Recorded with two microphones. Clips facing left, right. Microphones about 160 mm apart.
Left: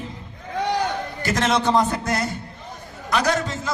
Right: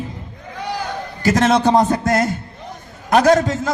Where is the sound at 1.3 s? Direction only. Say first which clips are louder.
Right 6 dB; 45° right (ahead or behind).